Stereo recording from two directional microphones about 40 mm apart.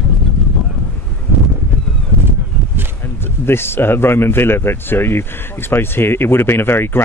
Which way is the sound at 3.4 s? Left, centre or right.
Left.